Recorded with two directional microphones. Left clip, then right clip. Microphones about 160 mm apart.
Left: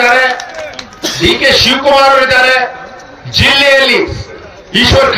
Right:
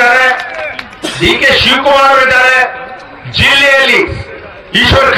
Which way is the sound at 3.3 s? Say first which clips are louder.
Even; 30° right (ahead or behind).